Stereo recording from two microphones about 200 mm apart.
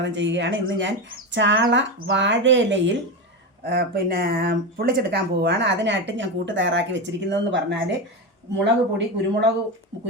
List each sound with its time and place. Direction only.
0.0 s speech: 65° right (ahead or behind)